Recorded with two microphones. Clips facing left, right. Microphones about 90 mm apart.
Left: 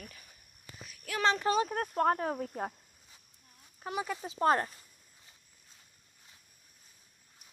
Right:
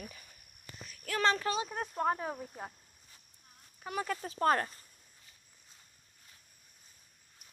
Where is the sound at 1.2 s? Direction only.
15° left (ahead or behind).